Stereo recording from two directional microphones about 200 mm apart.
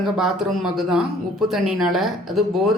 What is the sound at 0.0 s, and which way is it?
Speech, centre (ahead or behind).